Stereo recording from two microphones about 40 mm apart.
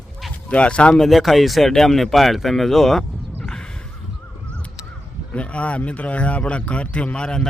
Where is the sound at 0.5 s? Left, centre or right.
Left.